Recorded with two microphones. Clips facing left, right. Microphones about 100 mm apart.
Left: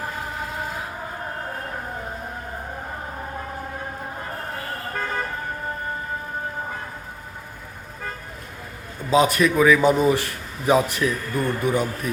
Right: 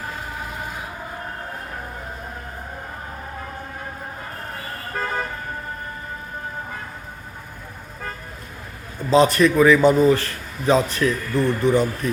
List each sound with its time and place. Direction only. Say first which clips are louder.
9.0 s a man's voice: right 3 dB; 10° left (ahead or behind)
10.0 s a man's voice: right 3 dB; 15° left (ahead or behind)